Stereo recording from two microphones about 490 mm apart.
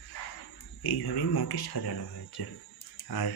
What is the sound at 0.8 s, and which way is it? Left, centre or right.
Speech, left.